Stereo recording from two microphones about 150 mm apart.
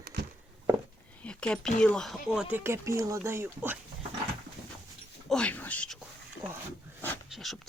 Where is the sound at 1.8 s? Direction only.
5° left (ahead or behind).